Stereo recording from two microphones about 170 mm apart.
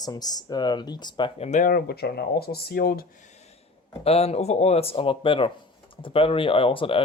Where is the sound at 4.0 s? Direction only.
35° left (ahead or behind).